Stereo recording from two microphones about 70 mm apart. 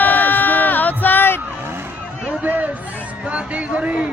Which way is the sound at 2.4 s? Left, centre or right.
Right.